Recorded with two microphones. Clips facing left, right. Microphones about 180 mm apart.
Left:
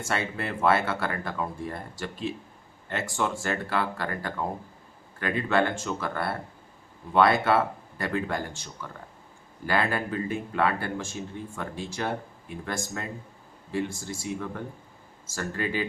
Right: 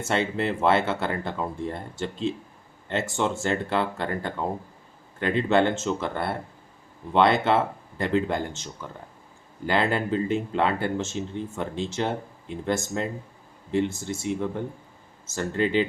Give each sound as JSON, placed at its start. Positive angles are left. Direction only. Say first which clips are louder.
{"t": 0.0, "sound": "speech", "louder": "right 5 dB", "side_deg": -25}